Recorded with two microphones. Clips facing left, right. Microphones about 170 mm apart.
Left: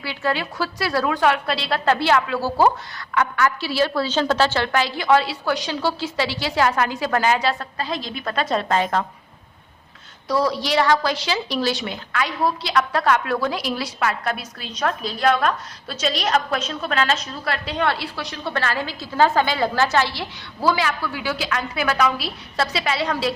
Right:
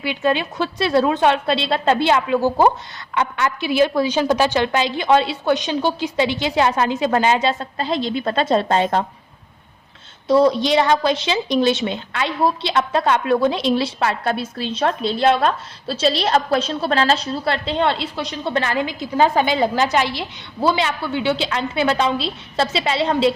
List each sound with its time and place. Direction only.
0.0 s a woman's voice: 20° right (ahead or behind)
10.2 s a woman's voice: 25° right (ahead or behind)